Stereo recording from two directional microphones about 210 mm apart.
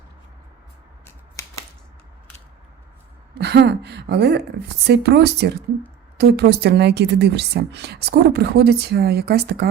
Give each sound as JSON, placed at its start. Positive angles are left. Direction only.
{"t": 3.3, "sound": "speech", "side_deg": -55}